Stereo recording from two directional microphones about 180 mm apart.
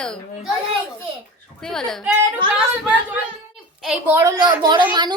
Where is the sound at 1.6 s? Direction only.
5° left (ahead or behind).